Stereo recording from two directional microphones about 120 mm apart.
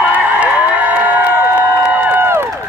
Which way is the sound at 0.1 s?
15° right (ahead or behind).